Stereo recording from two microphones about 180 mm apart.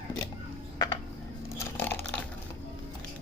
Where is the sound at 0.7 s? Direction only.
20° left (ahead or behind).